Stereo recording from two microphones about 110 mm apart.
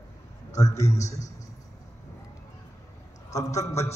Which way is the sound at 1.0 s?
90° left.